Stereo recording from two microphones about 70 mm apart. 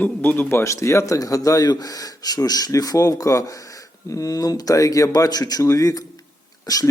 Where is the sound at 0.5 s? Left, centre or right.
Left.